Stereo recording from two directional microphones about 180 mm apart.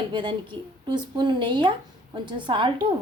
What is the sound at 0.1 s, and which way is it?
A woman's voice, 25° right (ahead or behind).